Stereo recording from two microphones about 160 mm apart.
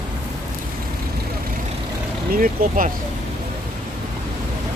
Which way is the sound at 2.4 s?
55° right (ahead or behind).